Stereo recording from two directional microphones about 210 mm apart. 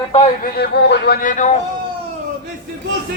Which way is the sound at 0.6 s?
50° left (ahead or behind).